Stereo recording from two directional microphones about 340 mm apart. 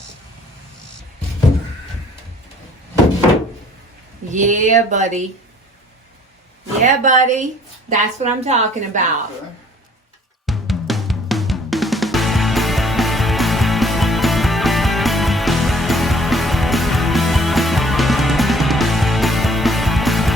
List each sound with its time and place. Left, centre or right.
4.3 s a woman's voice: right
6.8 s a woman's voice: right
10.4 s drum: centre